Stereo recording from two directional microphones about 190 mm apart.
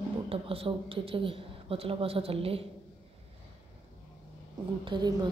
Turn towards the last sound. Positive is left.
turn(degrees=-25)  # may be behind; listen again after turning